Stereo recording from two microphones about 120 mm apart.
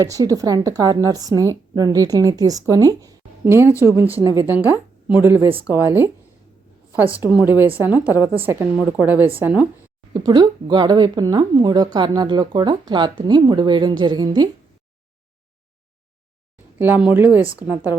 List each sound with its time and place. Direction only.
0.0 s a woman's voice: 30° right (ahead or behind)
3.4 s speech: 20° right (ahead or behind)
4.2 s a woman's voice: 30° right (ahead or behind)
4.7 s a woman's voice: 15° right (ahead or behind)
7.4 s a woman's voice: 20° right (ahead or behind)
10.2 s a woman's voice: 35° right (ahead or behind)
16.7 s a woman's voice: 15° right (ahead or behind)